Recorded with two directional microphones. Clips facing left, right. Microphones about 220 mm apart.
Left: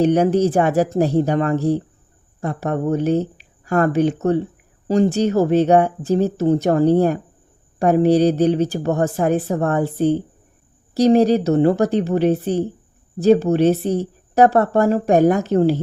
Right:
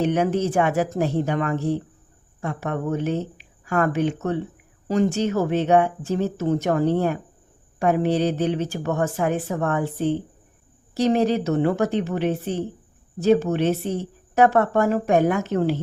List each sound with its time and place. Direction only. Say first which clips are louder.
0.0 s speech: left 6 dB; 35° left (ahead or behind)